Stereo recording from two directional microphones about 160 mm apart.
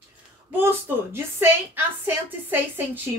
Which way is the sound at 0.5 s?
15° right (ahead or behind).